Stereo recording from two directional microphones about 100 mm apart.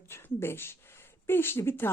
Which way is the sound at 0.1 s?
25° left (ahead or behind).